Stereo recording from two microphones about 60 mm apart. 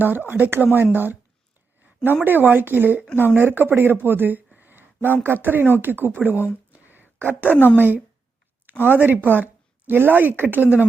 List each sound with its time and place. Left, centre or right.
0.0 s speech: right
2.2 s speech: right
6.7 s a sound: right
7.4 s speech: left
7.8 s speech: right